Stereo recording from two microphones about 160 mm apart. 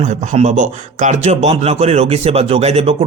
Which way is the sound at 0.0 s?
50° right (ahead or behind).